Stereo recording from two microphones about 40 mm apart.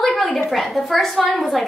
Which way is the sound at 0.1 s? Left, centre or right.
Left.